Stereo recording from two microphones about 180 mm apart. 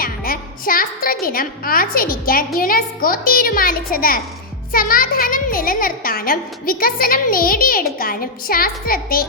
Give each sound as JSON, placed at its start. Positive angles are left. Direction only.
{"t": 0.0, "sound": "a woman's voice", "side_deg": 55}